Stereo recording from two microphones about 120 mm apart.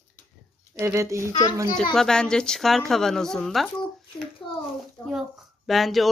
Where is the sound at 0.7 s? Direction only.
25° right (ahead or behind).